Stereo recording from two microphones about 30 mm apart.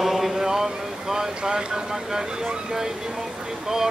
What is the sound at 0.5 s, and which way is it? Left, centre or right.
Vehicle, centre.